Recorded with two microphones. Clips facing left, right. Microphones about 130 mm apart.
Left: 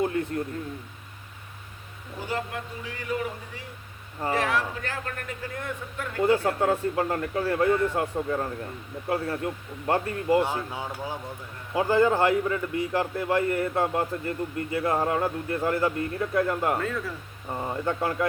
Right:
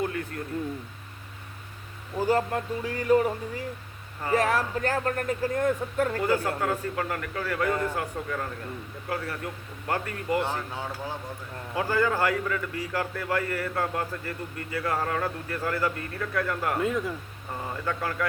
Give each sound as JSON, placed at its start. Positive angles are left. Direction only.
{"t": 0.0, "sound": "a sound", "side_deg": 25}
{"t": 2.2, "sound": "speech", "side_deg": -40}
{"t": 6.1, "sound": "a man's voice", "side_deg": 25}
{"t": 10.4, "sound": "a man's voice", "side_deg": 15}
{"t": 16.8, "sound": "speech", "side_deg": -15}
{"t": 17.5, "sound": "a man's voice", "side_deg": 20}